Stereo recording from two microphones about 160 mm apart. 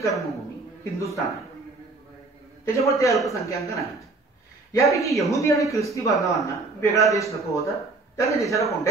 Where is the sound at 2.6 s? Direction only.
20° left (ahead or behind).